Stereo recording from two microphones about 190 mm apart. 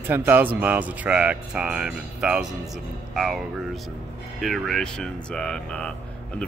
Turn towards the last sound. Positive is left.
turn(degrees=5)  # may be behind; listen again after turning